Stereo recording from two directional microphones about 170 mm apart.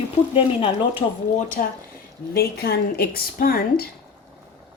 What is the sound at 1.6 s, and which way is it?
Speech, 50° left (ahead or behind).